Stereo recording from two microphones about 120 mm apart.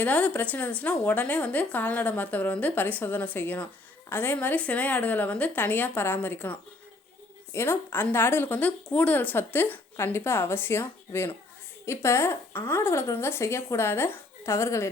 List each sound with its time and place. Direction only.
0.0 s a woman's voice: 10° left (ahead or behind)